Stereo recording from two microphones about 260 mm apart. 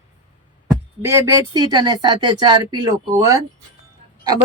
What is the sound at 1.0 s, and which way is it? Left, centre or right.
Speech, centre.